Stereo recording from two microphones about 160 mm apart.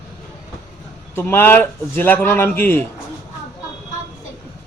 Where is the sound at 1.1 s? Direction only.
15° left (ahead or behind).